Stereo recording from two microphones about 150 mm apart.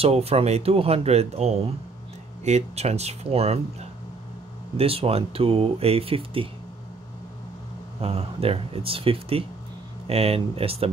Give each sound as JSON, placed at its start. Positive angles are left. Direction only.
{"t": 0.0, "sound": "speech", "side_deg": -45}
{"t": 4.7, "sound": "speech", "side_deg": -40}
{"t": 8.0, "sound": "speech", "side_deg": -40}